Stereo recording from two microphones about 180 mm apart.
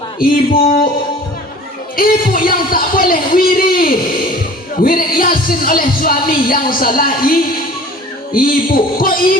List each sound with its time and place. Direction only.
0.2 s speech: 55° left (ahead or behind)
2.0 s speech: 50° left (ahead or behind)